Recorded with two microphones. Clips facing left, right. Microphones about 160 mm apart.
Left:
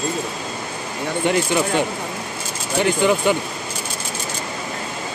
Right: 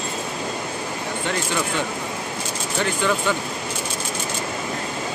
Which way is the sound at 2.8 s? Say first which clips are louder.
Left 5 dB; 15° left (ahead or behind).